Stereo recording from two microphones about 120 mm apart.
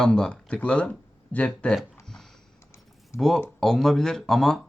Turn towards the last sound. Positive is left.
turn(degrees=5)  # may be behind; listen again after turning